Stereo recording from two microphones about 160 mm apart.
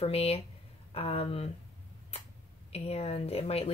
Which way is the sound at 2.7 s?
40° left (ahead or behind).